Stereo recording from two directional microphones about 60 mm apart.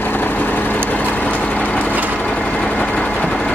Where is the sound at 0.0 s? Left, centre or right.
Left.